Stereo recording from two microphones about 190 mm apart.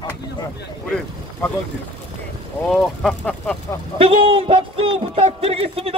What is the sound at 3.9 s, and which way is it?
A man's voice, 30° right (ahead or behind).